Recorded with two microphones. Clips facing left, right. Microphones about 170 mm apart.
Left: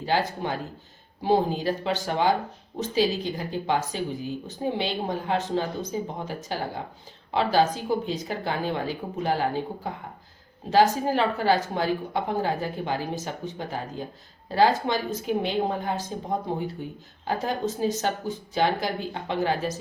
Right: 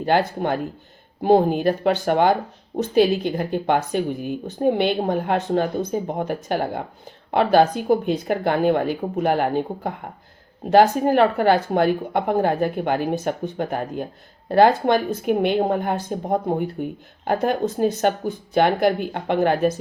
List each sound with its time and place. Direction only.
0.0 s a woman's voice: 55° right (ahead or behind)